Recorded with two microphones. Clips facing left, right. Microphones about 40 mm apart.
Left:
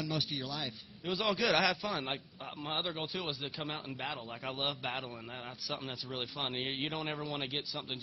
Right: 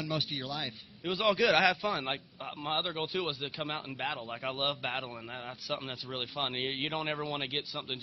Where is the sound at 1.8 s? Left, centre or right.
Centre.